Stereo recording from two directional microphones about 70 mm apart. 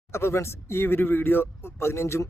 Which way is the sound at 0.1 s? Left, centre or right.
Left.